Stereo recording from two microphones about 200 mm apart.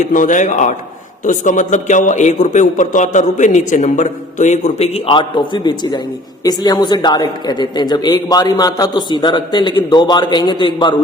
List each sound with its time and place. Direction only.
0.0 s a man's voice: 40° left (ahead or behind); by 10.9 s 25° left (ahead or behind)